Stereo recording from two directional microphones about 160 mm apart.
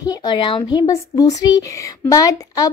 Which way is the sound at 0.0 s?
25° left (ahead or behind).